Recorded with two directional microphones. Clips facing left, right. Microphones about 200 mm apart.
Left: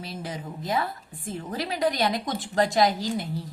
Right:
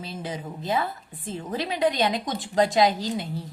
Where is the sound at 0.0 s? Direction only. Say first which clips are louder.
Right 1 dB; 25° right (ahead or behind).